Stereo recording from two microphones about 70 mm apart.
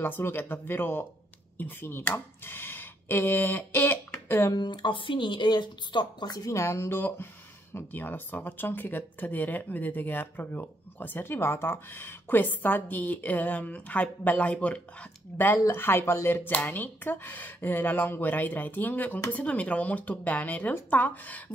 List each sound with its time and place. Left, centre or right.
0.0 s speech: left
4.8 s a woman's voice: left
6.5 s speech: left